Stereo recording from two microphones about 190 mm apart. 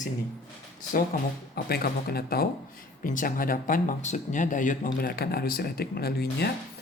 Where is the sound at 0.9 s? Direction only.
50° left (ahead or behind).